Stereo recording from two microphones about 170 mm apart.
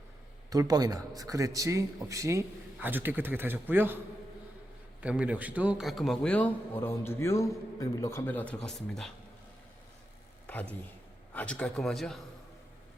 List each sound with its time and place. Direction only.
0.5 s a man's voice: 20° right (ahead or behind); by 9.1 s centre (ahead or behind)
10.4 s speech: 10° left (ahead or behind)